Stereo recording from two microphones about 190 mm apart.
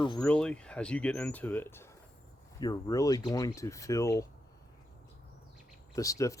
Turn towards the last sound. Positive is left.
turn(degrees=15)  # may be behind; listen again after turning